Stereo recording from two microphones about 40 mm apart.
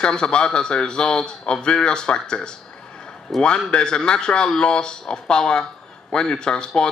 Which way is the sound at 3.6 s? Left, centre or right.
Left.